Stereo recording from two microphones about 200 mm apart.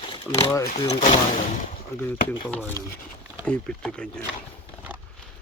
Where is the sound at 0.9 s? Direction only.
30° left (ahead or behind).